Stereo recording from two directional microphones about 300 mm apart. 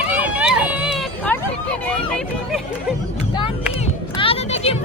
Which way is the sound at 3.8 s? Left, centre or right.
Centre.